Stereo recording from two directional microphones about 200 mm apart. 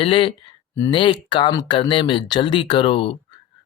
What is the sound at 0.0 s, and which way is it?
Speech, 25° left (ahead or behind).